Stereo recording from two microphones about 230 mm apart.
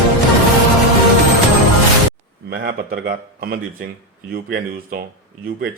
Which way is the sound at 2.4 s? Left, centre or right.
Right.